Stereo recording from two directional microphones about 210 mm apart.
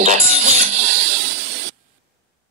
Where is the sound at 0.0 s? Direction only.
35° right (ahead or behind).